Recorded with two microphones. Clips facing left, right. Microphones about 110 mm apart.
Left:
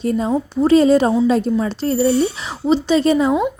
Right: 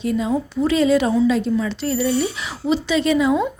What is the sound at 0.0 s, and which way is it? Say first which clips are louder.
A woman's voice: left 2 dB; 40° left (ahead or behind).